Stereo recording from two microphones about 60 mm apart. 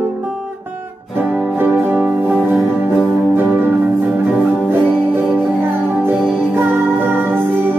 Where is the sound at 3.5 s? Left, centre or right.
Right.